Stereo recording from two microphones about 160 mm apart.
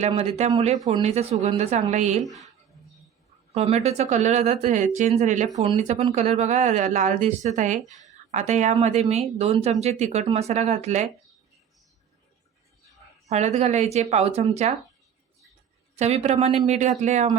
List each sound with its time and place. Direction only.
0.1 s speech: 35° right (ahead or behind)
3.5 s speech: 40° right (ahead or behind)
13.2 s a woman's voice: 45° right (ahead or behind)
16.0 s speech: 45° right (ahead or behind)